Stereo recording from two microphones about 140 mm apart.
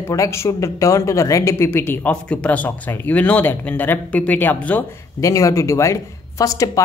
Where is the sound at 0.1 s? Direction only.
20° left (ahead or behind).